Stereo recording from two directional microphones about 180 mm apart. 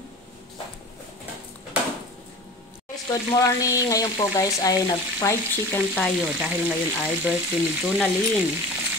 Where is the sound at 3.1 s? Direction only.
20° left (ahead or behind).